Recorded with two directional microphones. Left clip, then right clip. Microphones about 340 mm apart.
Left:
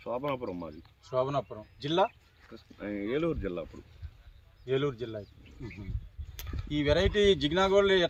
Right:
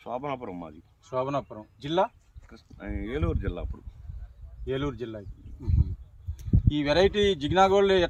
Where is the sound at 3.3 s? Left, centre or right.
Centre.